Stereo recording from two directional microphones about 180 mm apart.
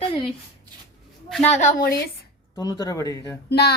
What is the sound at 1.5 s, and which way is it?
Speech, 45° left (ahead or behind).